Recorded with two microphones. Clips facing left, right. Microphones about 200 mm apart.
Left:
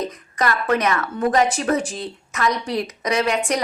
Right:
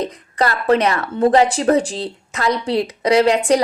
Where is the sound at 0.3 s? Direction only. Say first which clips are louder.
Right 5 dB; 30° right (ahead or behind).